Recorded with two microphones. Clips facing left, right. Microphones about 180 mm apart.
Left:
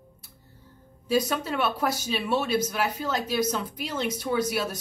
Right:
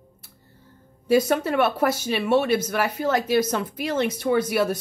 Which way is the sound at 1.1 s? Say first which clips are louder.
Right 6 dB; 60° right (ahead or behind).